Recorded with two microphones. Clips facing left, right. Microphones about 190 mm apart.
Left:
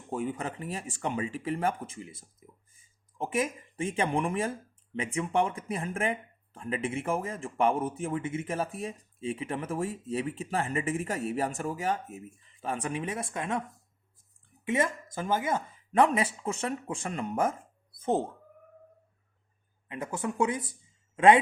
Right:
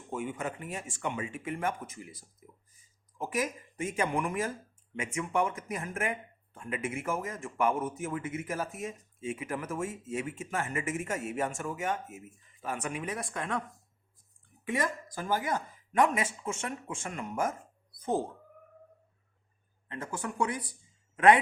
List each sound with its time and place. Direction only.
0.1 s speech: 35° left (ahead or behind)
14.6 s speech: 25° left (ahead or behind)
19.9 s speech: 20° left (ahead or behind)